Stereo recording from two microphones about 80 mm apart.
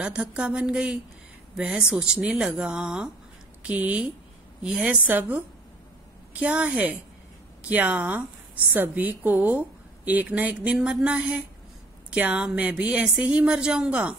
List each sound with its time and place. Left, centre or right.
0.0 s speech: centre
4.6 s speech: centre
5.0 s a woman's voice: right